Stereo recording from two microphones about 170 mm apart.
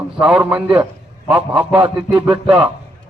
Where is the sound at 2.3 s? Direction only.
35° right (ahead or behind).